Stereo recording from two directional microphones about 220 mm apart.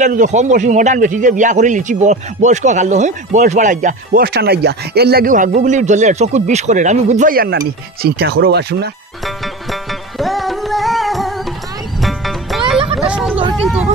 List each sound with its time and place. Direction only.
0.0 s a man's voice: 35° right (ahead or behind)
9.2 s music: centre (ahead or behind)
13.0 s a sound: 5° right (ahead or behind)
13.6 s speech: 5° right (ahead or behind)